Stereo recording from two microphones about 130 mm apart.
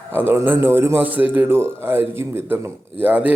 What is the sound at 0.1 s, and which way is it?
A man's voice, 15° right (ahead or behind).